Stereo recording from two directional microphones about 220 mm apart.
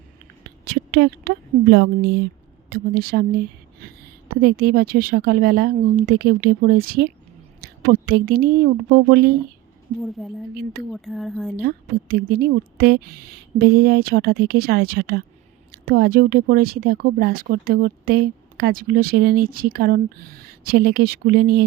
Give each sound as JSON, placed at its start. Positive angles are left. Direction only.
{"t": 0.6, "sound": "a woman's voice", "side_deg": -50}
{"t": 10.0, "sound": "speech", "side_deg": 0}
{"t": 10.5, "sound": "speech", "side_deg": -45}
{"t": 10.9, "sound": "speech", "side_deg": 0}
{"t": 11.5, "sound": "speech", "side_deg": -45}